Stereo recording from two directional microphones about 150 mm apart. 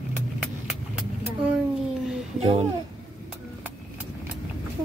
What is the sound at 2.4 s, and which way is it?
Speech, 40° right (ahead or behind).